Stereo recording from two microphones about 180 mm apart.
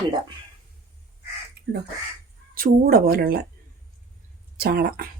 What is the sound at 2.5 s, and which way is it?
Speech, 55° right (ahead or behind).